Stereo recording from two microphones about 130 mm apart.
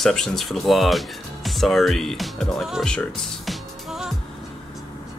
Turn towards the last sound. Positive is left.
turn(degrees=-5)  # may be behind; listen again after turning